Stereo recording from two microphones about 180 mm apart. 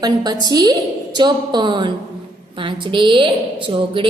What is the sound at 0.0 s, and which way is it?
A woman's voice, 20° right (ahead or behind).